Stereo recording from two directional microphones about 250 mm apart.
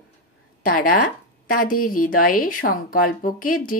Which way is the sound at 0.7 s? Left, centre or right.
Left.